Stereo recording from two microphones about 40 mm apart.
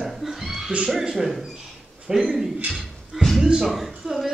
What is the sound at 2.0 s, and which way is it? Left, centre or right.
Speech, centre.